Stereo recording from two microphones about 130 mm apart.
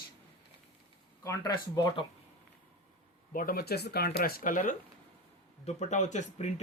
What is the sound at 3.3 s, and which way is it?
Speech, 90° left.